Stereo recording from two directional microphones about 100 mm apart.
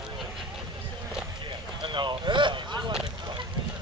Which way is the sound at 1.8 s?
50° right (ahead or behind).